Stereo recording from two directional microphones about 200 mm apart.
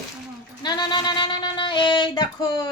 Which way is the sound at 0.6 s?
20° left (ahead or behind).